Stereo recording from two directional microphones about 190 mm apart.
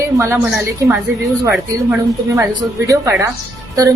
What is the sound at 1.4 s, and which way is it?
Speech, 10° right (ahead or behind).